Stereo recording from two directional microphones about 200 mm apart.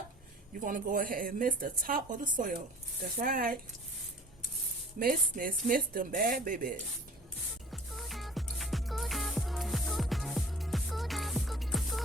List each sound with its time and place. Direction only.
0.5 s a woman's voice: 40° right (ahead or behind)
4.9 s a woman's voice: 45° right (ahead or behind)
7.7 s music: centre (ahead or behind)